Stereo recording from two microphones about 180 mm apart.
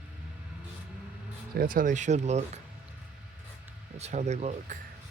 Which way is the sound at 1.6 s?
50° right (ahead or behind).